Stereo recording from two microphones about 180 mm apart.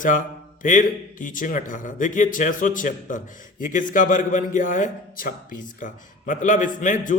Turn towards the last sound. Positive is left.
turn(degrees=45)  # may be behind; listen again after turning